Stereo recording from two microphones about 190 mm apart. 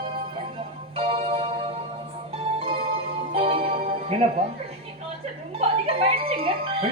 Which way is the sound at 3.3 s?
30° right (ahead or behind).